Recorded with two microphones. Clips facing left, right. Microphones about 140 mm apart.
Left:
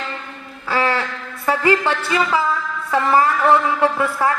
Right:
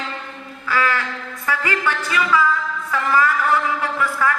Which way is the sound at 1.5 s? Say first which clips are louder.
Left 6 dB; 30° left (ahead or behind).